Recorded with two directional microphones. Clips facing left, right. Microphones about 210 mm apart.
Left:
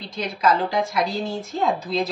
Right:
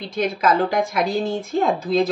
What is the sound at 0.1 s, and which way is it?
A woman's voice, 55° right (ahead or behind).